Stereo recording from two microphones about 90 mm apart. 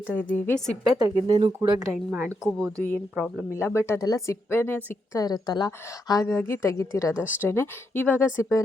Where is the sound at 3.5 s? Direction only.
30° left (ahead or behind).